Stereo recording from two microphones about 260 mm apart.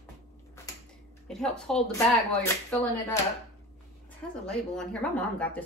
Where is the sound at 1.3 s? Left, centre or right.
Centre.